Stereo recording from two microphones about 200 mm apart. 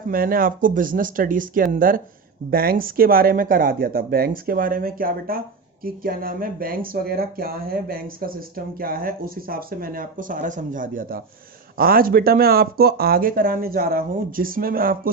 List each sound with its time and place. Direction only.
0.1 s speech: 45° right (ahead or behind)